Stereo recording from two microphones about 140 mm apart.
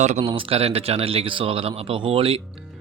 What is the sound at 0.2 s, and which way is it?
Speech, 40° right (ahead or behind).